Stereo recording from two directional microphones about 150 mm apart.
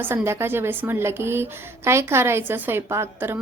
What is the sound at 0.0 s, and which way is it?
A woman's voice, 15° right (ahead or behind).